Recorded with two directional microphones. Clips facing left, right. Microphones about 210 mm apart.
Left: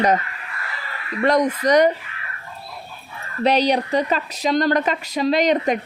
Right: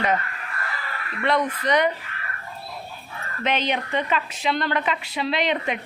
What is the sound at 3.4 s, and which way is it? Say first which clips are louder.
A woman's voice: left 7 dB; 35° left (ahead or behind).